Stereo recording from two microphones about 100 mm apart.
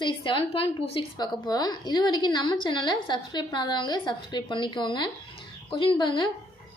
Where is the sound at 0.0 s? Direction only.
55° left (ahead or behind).